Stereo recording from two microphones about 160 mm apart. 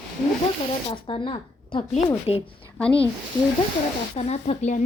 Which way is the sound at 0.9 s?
35° left (ahead or behind).